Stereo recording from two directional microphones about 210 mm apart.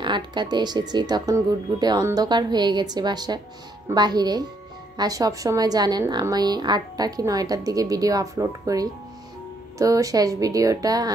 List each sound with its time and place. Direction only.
0.0 s a woman's voice: 20° right (ahead or behind)